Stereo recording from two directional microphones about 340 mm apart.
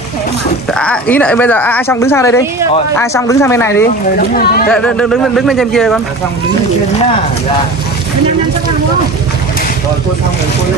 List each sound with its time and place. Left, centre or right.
0.7 s speech: centre
3.8 s speech: left
4.6 s a man's voice: centre